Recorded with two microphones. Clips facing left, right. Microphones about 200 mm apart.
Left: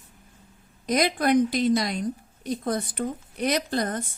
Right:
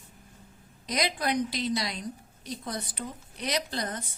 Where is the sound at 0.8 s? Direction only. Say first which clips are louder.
Left 7 dB; 50° left (ahead or behind).